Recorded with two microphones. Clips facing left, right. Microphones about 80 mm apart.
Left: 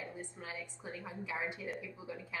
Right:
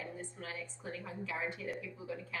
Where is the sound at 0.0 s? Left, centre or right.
Centre.